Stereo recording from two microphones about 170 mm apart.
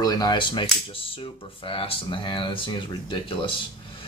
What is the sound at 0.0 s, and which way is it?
Speech, 20° left (ahead or behind).